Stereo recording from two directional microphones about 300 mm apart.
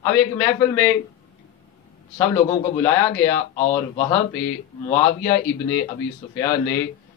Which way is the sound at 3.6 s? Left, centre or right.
Centre.